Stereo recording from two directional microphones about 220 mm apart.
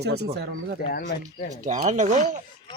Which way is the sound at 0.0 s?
45° right (ahead or behind).